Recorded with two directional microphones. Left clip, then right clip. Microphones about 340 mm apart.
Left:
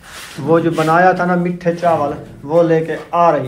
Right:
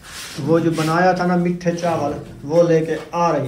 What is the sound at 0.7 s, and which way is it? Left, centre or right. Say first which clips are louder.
Speech: left 5 dB; left.